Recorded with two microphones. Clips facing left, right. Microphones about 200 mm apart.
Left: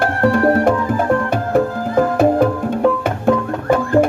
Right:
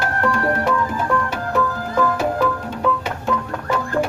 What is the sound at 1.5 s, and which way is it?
Music, 50° left (ahead or behind).